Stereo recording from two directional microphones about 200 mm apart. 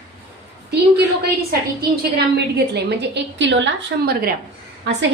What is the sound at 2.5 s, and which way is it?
A woman's voice, 55° right (ahead or behind).